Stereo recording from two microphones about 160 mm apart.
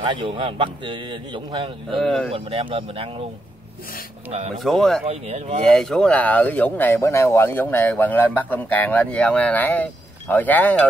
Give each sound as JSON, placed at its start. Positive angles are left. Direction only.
{"t": 0.0, "sound": "a man's voice", "side_deg": -30}
{"t": 2.0, "sound": "speech", "side_deg": 5}
{"t": 2.3, "sound": "a man's voice", "side_deg": -35}
{"t": 4.3, "sound": "a man's voice", "side_deg": -40}
{"t": 4.6, "sound": "speech", "side_deg": 0}
{"t": 5.0, "sound": "a man's voice", "side_deg": -40}
{"t": 5.7, "sound": "speech", "side_deg": 5}